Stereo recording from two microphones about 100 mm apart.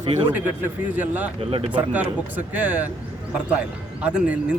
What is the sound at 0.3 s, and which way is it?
Speech, 15° right (ahead or behind).